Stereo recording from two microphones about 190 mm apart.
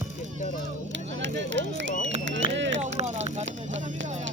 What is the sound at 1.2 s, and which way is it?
Speech, 70° right (ahead or behind).